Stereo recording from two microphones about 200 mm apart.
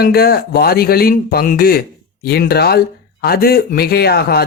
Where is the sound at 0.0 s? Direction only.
50° left (ahead or behind).